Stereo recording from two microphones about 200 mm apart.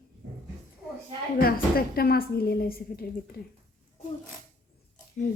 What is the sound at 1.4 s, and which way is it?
A woman's voice, 50° left (ahead or behind).